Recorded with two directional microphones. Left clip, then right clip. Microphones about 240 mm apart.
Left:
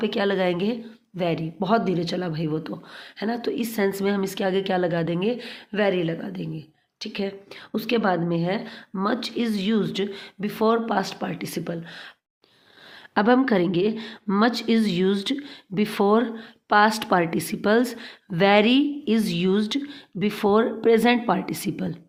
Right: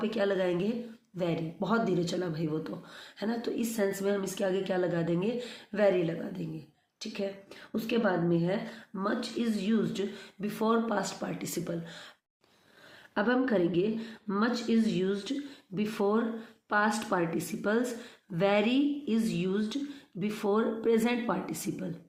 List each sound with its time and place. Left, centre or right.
0.0 s a woman's voice: left
13.1 s a woman's voice: left